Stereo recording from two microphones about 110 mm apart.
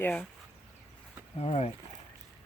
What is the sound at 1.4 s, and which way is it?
Speech, 75° left (ahead or behind).